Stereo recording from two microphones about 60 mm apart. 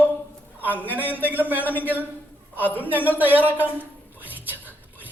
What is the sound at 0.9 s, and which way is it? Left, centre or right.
Speech, right.